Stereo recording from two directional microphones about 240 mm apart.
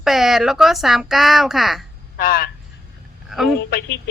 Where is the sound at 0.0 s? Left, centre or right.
Centre.